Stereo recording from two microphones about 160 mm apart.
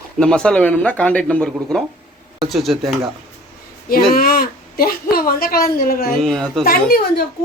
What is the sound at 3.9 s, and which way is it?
A woman's voice, 65° left (ahead or behind).